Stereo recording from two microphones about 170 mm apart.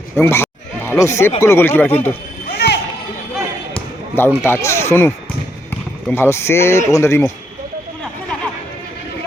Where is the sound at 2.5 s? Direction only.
75° left (ahead or behind).